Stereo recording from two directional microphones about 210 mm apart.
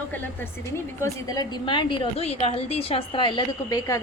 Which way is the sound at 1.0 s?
15° left (ahead or behind).